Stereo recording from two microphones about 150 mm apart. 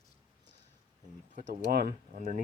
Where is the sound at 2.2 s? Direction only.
55° right (ahead or behind).